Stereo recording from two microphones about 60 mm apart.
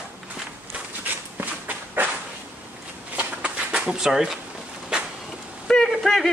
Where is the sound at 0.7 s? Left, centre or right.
Right.